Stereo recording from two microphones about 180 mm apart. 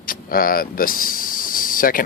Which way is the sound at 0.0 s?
50° left (ahead or behind).